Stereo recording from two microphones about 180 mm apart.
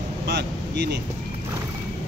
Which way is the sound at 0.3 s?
70° right (ahead or behind).